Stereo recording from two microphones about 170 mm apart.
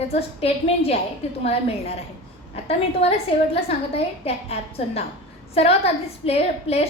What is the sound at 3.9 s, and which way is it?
A woman's voice, 35° left (ahead or behind).